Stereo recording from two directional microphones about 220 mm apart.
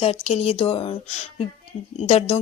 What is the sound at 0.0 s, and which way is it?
Speech, 30° left (ahead or behind).